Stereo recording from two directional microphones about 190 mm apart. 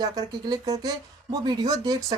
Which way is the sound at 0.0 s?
20° right (ahead or behind).